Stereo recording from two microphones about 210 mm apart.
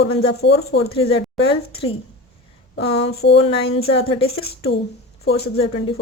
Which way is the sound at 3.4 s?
25° left (ahead or behind).